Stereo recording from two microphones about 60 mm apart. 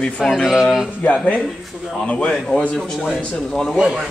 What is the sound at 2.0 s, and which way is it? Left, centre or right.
Speech, centre.